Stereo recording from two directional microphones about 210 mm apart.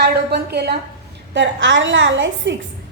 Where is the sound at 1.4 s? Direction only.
60° right (ahead or behind).